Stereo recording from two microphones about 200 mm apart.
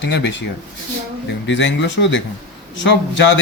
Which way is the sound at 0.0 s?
60° left (ahead or behind).